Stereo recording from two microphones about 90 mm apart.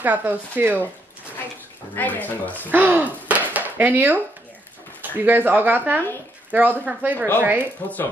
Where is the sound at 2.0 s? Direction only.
20° left (ahead or behind).